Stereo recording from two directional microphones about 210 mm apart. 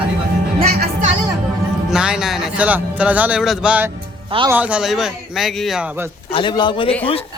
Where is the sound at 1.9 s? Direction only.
5° right (ahead or behind).